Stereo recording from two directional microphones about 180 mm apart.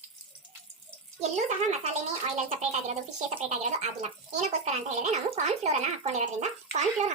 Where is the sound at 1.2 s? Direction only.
40° right (ahead or behind).